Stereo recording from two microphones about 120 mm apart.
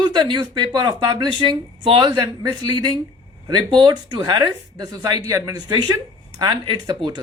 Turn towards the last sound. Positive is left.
turn(degrees=-40)  # may be behind; listen again after turning